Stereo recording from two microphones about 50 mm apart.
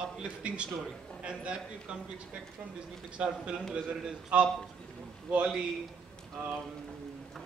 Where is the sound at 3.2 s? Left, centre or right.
Right.